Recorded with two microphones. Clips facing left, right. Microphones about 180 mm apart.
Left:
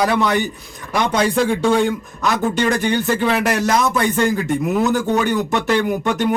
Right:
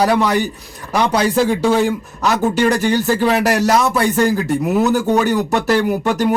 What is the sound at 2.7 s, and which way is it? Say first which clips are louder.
Speech: right 2 dB; 35° right (ahead or behind).